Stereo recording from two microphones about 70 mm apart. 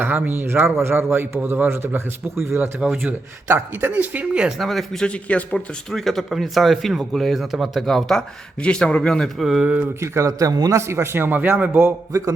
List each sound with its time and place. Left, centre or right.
0.0 s a man's voice: right
2.8 s speech: centre
3.5 s speech: right
4.4 s speech: centre
5.0 s speech: centre
5.9 s speech: centre
9.4 s speech: centre
10.0 s a man's voice: right
10.8 s a man's voice: right